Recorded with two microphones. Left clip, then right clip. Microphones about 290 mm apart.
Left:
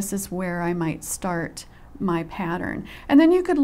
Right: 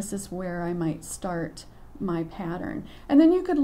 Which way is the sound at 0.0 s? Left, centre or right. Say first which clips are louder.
Left 4 dB; left.